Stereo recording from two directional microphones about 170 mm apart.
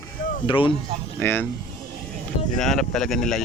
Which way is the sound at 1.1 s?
10° left (ahead or behind).